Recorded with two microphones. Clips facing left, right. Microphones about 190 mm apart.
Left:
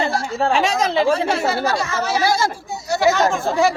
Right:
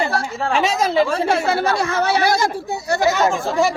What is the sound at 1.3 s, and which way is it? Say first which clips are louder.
Speech: right 1 dB; 55° right (ahead or behind).